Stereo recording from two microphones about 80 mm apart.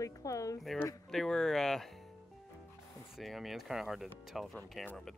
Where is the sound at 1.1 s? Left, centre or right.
Centre.